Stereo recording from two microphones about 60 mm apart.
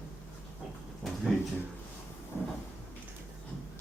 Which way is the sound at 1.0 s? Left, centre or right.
Centre.